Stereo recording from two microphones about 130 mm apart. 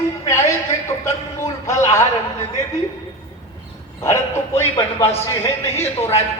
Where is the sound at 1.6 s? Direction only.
25° left (ahead or behind).